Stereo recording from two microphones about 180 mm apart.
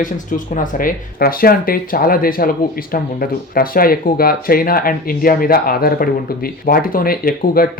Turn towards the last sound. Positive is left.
turn(degrees=55)  # may be behind; listen again after turning